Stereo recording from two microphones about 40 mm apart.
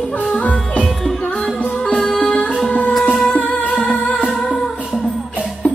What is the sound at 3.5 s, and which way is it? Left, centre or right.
Music, left.